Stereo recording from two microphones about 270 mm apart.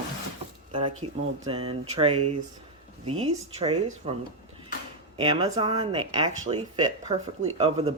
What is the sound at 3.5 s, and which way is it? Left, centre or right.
Speech, right.